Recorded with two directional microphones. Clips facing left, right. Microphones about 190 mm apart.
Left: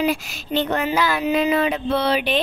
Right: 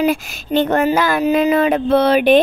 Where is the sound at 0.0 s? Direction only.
50° right (ahead or behind).